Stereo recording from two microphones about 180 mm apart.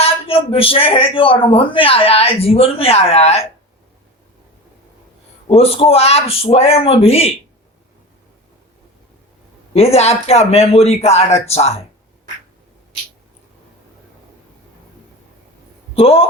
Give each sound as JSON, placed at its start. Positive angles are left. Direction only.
{"t": 0.0, "sound": "a man's voice", "side_deg": 30}
{"t": 5.5, "sound": "a man's voice", "side_deg": 35}
{"t": 9.7, "sound": "a man's voice", "side_deg": 35}
{"t": 16.0, "sound": "a man's voice", "side_deg": 35}